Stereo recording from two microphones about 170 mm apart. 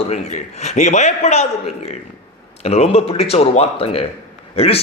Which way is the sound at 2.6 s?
40° left (ahead or behind).